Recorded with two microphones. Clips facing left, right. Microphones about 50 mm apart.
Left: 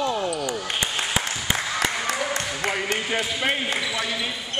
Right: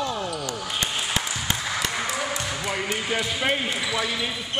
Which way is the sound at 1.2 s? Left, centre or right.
Centre.